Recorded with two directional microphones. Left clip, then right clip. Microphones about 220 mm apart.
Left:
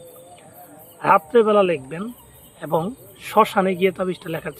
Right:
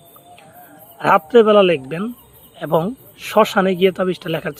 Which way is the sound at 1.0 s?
30° right (ahead or behind).